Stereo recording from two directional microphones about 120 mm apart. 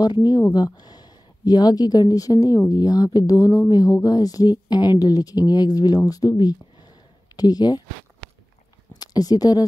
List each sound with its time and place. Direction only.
0.0 s speech: 35° left (ahead or behind)
9.0 s speech: 30° left (ahead or behind)